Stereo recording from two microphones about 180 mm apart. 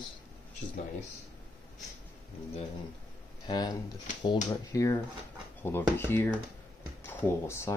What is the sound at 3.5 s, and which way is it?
Speech, 25° left (ahead or behind).